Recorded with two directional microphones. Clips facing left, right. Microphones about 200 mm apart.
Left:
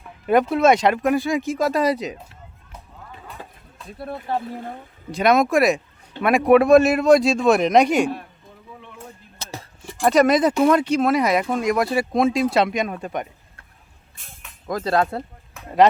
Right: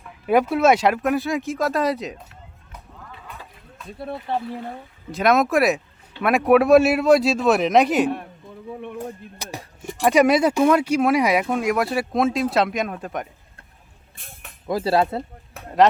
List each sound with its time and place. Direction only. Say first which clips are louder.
0.3 s speech: left 1 dB; 5° right (ahead or behind)
3.9 s speech: even; centre (ahead or behind)
9.4 s a sound: left 3 dB; 15° right (ahead or behind)
10.0 s speech: even; 10° right (ahead or behind)
14.7 s speech: right 1 dB; 5° right (ahead or behind)